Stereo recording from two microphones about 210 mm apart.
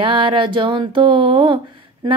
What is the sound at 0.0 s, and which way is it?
Speech, 25° right (ahead or behind).